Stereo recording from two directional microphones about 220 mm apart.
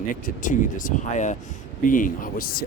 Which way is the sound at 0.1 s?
35° left (ahead or behind).